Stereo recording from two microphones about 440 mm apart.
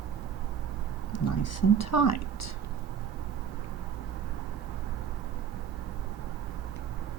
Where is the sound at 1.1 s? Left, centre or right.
Left.